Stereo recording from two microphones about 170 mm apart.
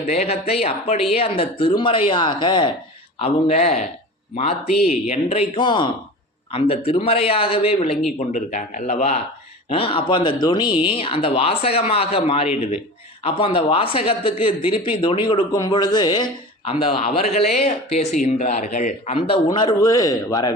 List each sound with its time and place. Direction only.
0.0 s speech: 40° left (ahead or behind)
5.0 s speech: 35° left (ahead or behind)
19.5 s speech: 25° left (ahead or behind)